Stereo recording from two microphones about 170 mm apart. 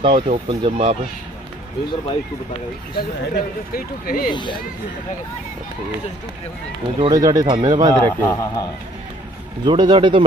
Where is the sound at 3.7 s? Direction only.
60° left (ahead or behind).